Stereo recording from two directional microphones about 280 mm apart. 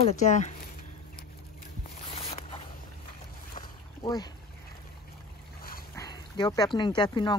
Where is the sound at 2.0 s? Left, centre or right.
Centre.